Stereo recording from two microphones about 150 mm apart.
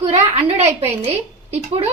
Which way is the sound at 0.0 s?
45° right (ahead or behind).